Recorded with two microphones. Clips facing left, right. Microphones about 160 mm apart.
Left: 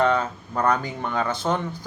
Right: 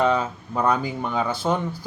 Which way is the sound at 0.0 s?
10° right (ahead or behind).